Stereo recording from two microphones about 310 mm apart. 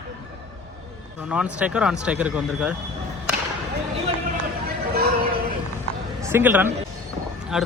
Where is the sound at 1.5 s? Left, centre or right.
Centre.